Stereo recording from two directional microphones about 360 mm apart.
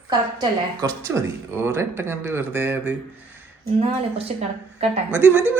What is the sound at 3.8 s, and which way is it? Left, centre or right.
Speech, centre.